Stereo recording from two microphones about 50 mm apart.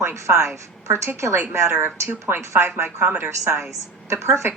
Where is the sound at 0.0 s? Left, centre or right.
Right.